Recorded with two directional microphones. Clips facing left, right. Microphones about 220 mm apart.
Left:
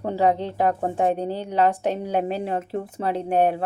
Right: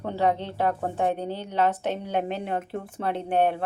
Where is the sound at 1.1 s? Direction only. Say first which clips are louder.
Left 4 dB; 35° left (ahead or behind).